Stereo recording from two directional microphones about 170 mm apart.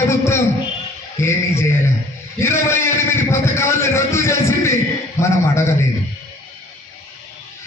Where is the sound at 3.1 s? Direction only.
15° left (ahead or behind).